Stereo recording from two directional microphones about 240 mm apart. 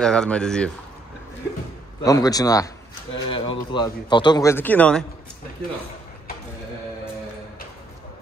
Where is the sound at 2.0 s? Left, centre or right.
Centre.